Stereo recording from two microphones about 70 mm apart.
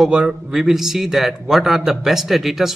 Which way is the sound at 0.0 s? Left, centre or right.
Centre.